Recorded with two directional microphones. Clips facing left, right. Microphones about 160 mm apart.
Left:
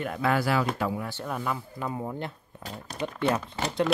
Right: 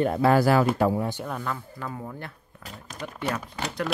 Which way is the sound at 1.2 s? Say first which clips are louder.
Even; 5° left (ahead or behind).